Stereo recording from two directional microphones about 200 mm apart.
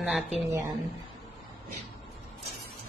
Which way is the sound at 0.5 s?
15° right (ahead or behind).